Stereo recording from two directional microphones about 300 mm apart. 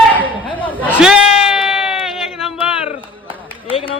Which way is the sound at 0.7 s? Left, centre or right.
Centre.